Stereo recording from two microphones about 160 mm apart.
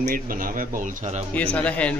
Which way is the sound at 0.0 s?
60° right (ahead or behind).